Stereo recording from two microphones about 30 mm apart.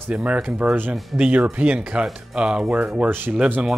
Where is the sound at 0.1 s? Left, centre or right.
Right.